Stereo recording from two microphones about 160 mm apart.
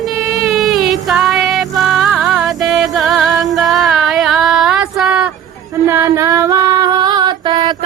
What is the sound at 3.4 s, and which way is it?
Female singing, centre (ahead or behind).